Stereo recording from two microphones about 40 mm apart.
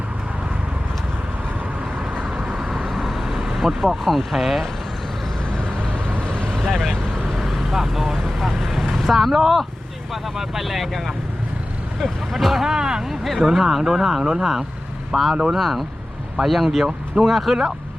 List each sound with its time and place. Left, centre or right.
2.3 s vehicle: right
2.6 s vehicle: centre
4.0 s speech: centre
6.1 s vehicle: left
6.7 s vehicle: centre
7.3 s speech: centre
12.7 s speech: centre